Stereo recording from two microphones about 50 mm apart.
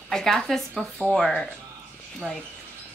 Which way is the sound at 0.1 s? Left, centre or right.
Centre.